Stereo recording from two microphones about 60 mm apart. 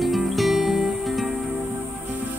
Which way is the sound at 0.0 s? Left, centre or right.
Centre.